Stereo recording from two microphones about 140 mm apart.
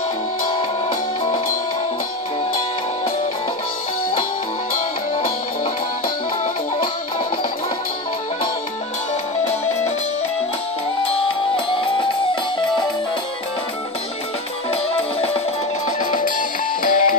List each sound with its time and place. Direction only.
0.5 s music: 35° left (ahead or behind)
6.0 s music: 90° left
11.5 s music: 35° left (ahead or behind)
14.7 s music: 45° left (ahead or behind)
16.0 s music: 75° left (ahead or behind)